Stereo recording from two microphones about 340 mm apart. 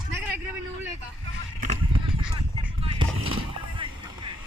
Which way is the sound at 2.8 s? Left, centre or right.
Centre.